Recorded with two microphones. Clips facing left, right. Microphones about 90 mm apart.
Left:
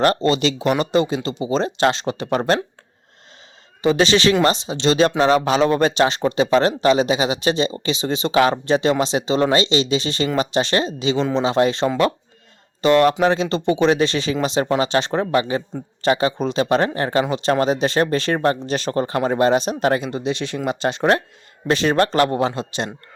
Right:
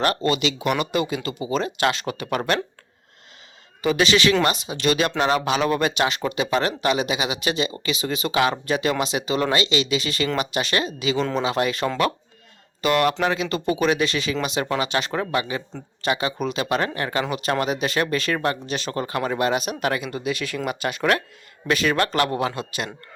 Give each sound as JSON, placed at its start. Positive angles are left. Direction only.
{"t": 0.0, "sound": "speech", "side_deg": 30}
{"t": 3.8, "sound": "speech", "side_deg": 30}